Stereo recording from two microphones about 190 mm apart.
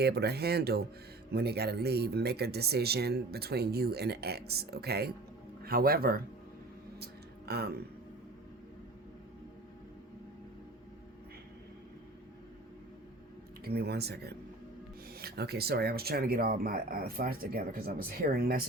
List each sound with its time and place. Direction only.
0.0 s speech: 60° right (ahead or behind)
7.0 s music: 55° right (ahead or behind)
13.7 s speech: 55° right (ahead or behind)